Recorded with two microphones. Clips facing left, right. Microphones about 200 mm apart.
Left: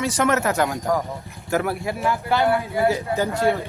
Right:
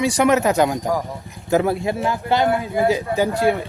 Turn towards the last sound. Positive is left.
turn(degrees=-15)  # may be behind; listen again after turning